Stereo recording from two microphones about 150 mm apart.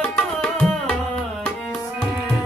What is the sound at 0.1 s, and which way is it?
Music, 5° left (ahead or behind).